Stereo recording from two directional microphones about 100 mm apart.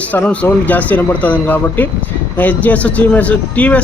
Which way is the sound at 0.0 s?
15° left (ahead or behind).